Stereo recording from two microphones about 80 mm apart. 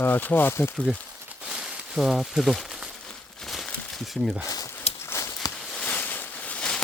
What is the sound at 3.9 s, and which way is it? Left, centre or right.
Speech, centre.